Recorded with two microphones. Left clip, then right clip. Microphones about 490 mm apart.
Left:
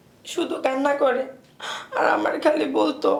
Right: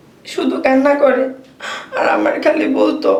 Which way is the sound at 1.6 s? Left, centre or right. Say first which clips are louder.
Right 4 dB; left.